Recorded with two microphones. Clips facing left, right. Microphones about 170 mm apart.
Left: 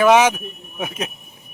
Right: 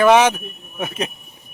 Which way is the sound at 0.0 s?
10° left (ahead or behind).